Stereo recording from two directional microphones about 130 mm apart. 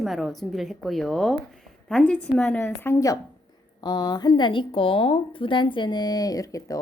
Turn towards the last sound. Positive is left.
turn(degrees=25)  # may be behind; listen again after turning